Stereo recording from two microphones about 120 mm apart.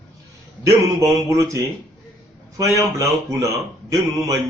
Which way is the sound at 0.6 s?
25° right (ahead or behind).